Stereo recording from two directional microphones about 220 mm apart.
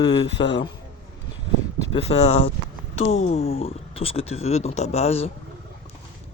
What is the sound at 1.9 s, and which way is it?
Speech, 30° left (ahead or behind).